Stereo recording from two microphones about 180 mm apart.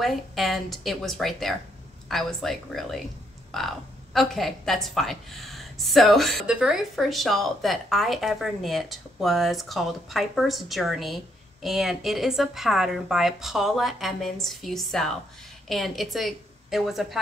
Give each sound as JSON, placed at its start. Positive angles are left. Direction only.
{"t": 0.0, "sound": "a woman's voice", "side_deg": 0}